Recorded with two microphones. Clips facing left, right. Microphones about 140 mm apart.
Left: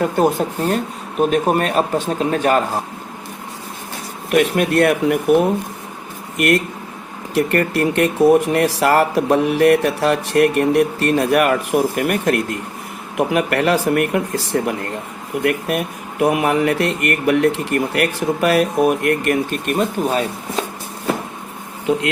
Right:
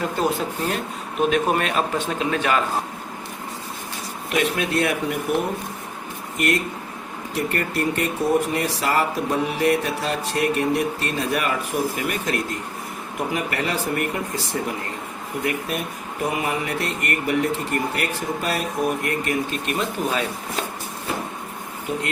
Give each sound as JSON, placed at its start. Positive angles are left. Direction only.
{"t": 0.0, "sound": "speech", "side_deg": 55}
{"t": 1.3, "sound": "speech", "side_deg": 40}
{"t": 4.3, "sound": "speech", "side_deg": 55}
{"t": 7.3, "sound": "speech", "side_deg": 70}
{"t": 13.1, "sound": "speech", "side_deg": 70}
{"t": 19.7, "sound": "speech", "side_deg": 40}
{"t": 21.9, "sound": "speech", "side_deg": 90}